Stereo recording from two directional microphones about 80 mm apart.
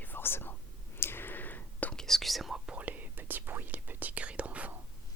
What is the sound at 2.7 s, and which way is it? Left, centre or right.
Whispering, centre.